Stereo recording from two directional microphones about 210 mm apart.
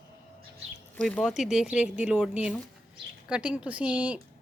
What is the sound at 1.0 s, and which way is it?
A woman's voice, centre (ahead or behind).